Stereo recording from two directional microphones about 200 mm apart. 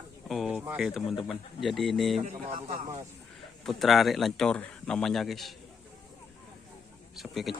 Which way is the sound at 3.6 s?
Centre (ahead or behind).